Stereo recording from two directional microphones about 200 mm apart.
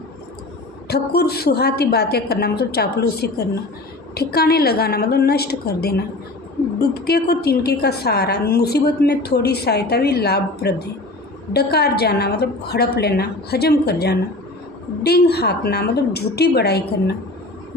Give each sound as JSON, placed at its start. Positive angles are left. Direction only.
{"t": 0.9, "sound": "a woman's voice", "side_deg": 55}